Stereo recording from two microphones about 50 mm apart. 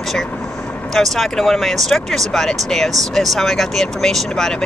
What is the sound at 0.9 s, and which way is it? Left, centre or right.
Speech, centre.